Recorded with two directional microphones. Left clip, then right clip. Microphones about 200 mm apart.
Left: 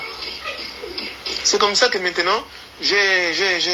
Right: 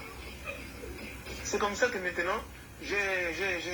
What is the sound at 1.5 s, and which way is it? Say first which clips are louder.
A man's voice: left 12 dB; 40° left (ahead or behind).